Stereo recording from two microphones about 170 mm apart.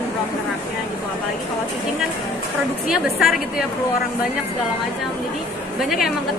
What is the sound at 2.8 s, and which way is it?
Speech, 5° right (ahead or behind).